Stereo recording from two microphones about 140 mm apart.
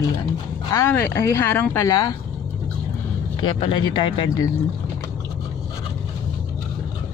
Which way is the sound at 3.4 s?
35° left (ahead or behind).